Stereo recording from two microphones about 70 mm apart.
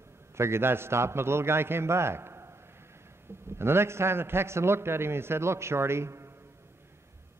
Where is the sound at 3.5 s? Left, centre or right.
Right.